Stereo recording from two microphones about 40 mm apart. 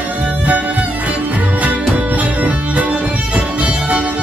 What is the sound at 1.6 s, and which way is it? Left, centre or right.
Music, right.